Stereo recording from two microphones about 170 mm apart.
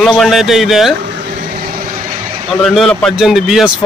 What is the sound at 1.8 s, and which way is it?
Vehicle, 50° right (ahead or behind).